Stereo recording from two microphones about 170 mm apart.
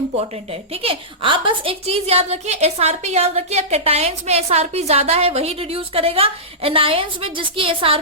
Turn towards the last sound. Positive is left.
turn(degrees=-30)  # may be behind; listen again after turning